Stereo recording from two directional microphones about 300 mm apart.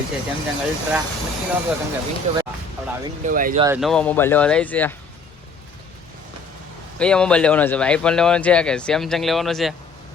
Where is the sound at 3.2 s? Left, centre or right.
Right.